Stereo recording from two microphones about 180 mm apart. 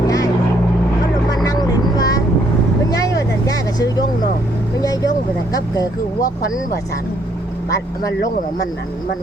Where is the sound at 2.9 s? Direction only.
20° left (ahead or behind).